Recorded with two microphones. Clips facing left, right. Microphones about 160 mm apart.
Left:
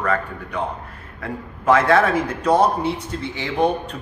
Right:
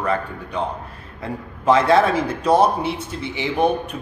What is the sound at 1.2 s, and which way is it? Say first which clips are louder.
Speech: right 1 dB; 30° right (ahead or behind).